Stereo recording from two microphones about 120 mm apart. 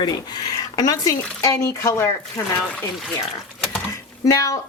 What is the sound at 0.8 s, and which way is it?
A woman's voice, 30° left (ahead or behind).